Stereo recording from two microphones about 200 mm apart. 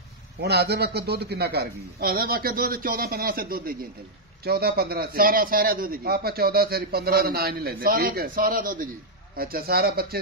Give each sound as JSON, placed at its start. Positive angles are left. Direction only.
{"t": 0.4, "sound": "a man's voice", "side_deg": -55}